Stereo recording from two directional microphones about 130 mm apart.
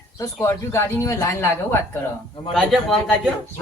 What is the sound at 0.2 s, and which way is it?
Speech, 25° left (ahead or behind).